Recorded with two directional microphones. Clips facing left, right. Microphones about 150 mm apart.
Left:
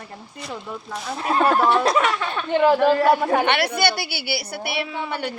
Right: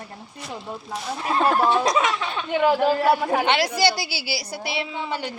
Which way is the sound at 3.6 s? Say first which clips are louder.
Even; 60° left (ahead or behind).